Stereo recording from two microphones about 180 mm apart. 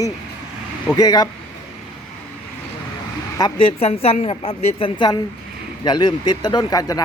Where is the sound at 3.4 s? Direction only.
30° left (ahead or behind).